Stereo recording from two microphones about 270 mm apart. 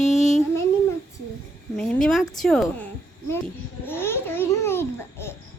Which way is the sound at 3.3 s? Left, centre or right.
Centre.